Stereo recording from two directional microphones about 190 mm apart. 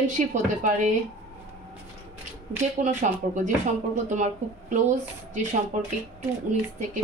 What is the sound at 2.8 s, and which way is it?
Speech, 40° right (ahead or behind).